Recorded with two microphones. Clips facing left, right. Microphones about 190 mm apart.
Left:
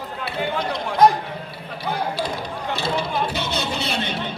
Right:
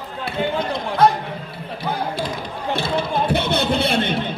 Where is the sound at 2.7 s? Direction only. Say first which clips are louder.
Right 2 dB; 55° right (ahead or behind).